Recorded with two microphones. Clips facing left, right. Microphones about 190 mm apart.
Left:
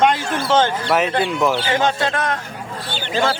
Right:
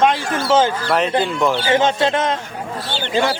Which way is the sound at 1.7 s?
25° right (ahead or behind).